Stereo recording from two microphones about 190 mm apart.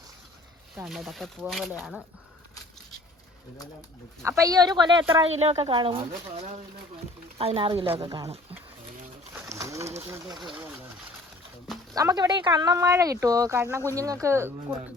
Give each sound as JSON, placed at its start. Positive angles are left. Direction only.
{"t": 0.8, "sound": "speech", "side_deg": 0}
{"t": 4.2, "sound": "speech", "side_deg": -15}
{"t": 9.3, "sound": "pigeon", "side_deg": -15}
{"t": 10.0, "sound": "speech", "side_deg": -15}
{"t": 11.9, "sound": "speech", "side_deg": -20}